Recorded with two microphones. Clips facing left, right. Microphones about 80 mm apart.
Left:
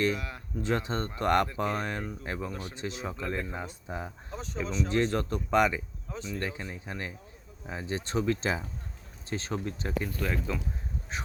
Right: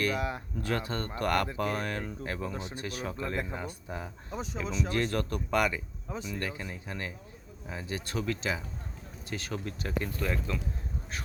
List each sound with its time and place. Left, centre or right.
0.2 s speech: right
0.6 s speech: left
2.5 s speech: right
2.7 s speech: left
4.4 s speech: centre
4.9 s speech: left
6.1 s speech: centre
6.4 s speech: left
10.0 s speech: centre